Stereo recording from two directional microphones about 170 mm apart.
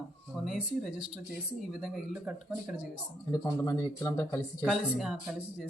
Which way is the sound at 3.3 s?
20° left (ahead or behind).